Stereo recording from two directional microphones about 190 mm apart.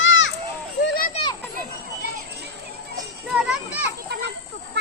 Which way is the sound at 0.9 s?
50° left (ahead or behind).